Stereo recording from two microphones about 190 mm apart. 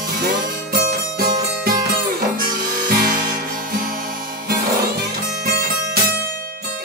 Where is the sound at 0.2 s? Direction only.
55° right (ahead or behind).